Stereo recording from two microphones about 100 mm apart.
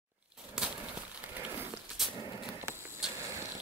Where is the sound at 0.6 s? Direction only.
10° right (ahead or behind).